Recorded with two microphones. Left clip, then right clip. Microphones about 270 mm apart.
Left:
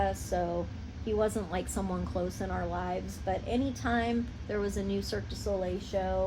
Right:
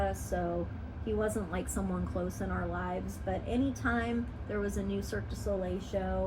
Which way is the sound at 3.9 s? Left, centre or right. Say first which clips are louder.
Left 2 dB; left.